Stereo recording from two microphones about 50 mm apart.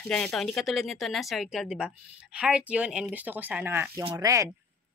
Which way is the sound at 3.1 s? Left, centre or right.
Right.